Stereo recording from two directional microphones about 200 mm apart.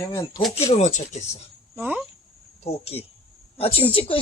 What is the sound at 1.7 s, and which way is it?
Speech, 10° right (ahead or behind).